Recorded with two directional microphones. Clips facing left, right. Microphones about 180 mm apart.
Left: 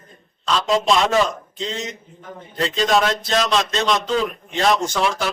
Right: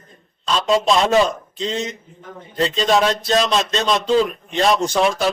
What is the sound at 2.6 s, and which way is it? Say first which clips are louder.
Speech: right 2 dB; 30° right (ahead or behind).